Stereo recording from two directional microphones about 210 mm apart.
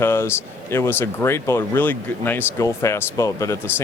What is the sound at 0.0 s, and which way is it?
Speech, 10° left (ahead or behind).